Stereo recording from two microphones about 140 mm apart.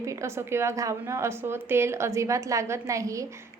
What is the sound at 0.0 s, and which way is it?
A woman's voice, 20° right (ahead or behind).